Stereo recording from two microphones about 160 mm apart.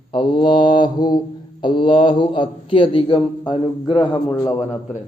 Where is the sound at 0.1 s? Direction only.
35° left (ahead or behind).